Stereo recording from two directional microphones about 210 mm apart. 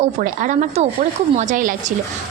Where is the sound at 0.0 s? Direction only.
40° right (ahead or behind).